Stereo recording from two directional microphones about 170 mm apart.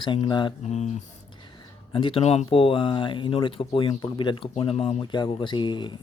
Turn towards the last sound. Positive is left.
turn(degrees=25)  # may be behind; listen again after turning